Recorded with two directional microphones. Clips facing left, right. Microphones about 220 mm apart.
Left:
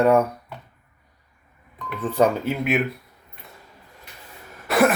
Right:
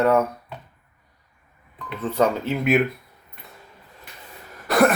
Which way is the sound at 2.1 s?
10° left (ahead or behind).